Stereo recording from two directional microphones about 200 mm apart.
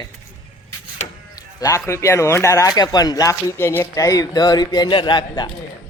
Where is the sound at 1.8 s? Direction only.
15° left (ahead or behind).